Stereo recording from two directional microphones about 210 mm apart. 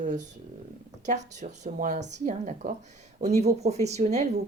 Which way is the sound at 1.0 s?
35° right (ahead or behind).